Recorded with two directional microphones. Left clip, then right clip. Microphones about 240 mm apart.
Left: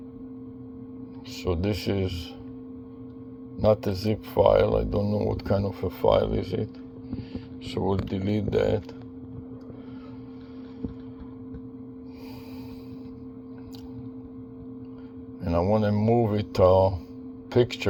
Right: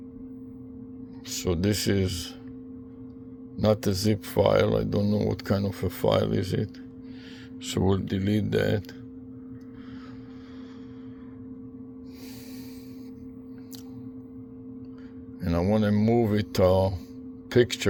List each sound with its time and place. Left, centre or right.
1.3 s speech: right
3.6 s speech: right
7.7 s speech: right
15.4 s speech: right